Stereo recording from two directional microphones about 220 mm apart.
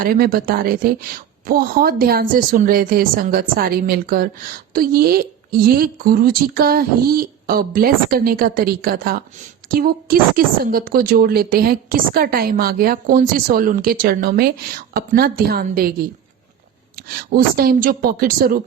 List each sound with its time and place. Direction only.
0.0 s a woman's voice: 40° right (ahead or behind)